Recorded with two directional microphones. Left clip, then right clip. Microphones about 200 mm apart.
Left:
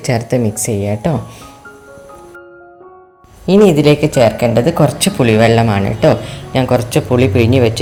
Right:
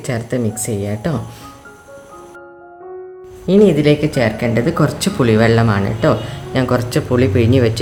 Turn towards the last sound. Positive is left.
turn(degrees=0)  # may be behind; listen again after turning